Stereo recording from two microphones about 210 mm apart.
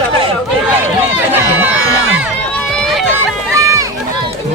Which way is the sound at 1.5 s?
5° right (ahead or behind).